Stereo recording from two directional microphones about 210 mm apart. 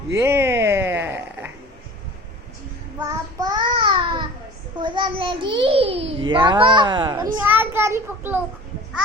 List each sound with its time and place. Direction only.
0.1 s a sound: 10° right (ahead or behind)
3.0 s child singing: 15° right (ahead or behind)
4.8 s a child's voice: 25° right (ahead or behind)
7.4 s child singing: 10° right (ahead or behind)